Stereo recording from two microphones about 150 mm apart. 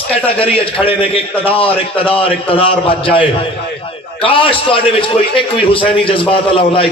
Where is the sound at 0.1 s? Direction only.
40° left (ahead or behind).